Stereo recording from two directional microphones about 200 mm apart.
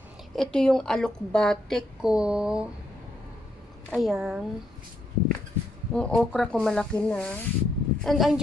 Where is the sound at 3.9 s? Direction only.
Centre (ahead or behind).